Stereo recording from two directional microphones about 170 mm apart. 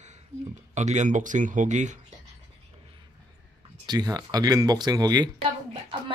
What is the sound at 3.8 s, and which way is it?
Speech, 25° right (ahead or behind).